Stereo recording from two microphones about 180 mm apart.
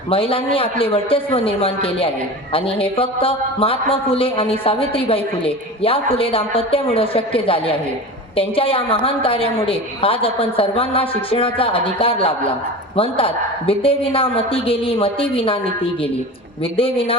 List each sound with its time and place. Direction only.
0.1 s a man's voice: 30° left (ahead or behind)